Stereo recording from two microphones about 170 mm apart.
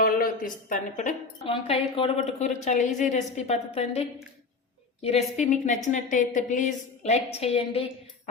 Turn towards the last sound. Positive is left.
turn(degrees=35)  # may be behind; listen again after turning